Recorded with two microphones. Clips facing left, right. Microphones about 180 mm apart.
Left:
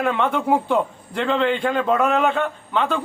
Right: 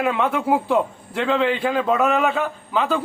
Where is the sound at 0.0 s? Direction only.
5° right (ahead or behind).